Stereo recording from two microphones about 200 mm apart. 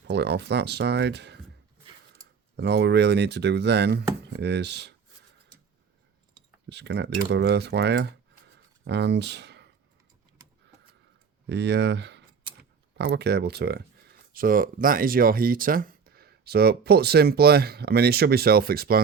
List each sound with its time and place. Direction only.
0.1 s speech: 55° right (ahead or behind)
6.7 s speech: 60° right (ahead or behind)
11.4 s speech: 60° right (ahead or behind)